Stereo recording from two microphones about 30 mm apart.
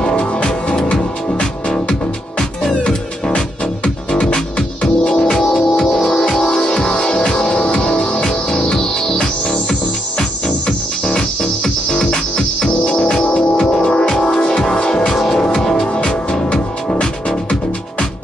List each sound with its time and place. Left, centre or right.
0.1 s music: left
3.3 s music: left
5.4 s music: centre
6.7 s music: left; by 15.9 s centre
16.4 s music: left